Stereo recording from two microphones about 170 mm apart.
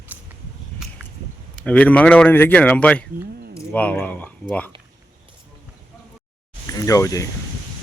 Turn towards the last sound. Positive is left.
turn(degrees=20)  # may be behind; listen again after turning